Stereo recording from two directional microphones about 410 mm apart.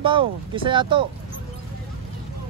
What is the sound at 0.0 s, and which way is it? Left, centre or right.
Speech, centre.